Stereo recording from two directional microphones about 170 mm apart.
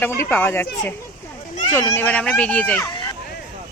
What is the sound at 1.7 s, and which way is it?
Speech, 15° left (ahead or behind).